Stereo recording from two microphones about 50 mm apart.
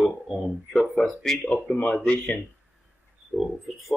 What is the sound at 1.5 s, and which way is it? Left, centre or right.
Speech, left.